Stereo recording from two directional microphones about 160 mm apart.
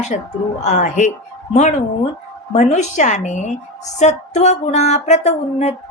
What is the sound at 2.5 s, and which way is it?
A woman's voice, 45° left (ahead or behind).